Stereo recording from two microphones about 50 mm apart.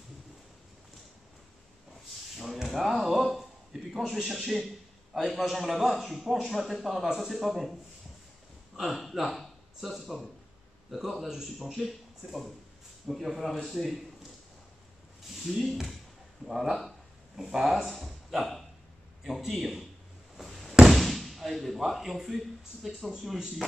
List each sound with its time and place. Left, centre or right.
2.3 s a sound: centre
3.9 s a man's voice: centre
8.7 s a man's voice: centre
15.4 s a man's voice: centre
20.3 s slam: centre
20.9 s speech: centre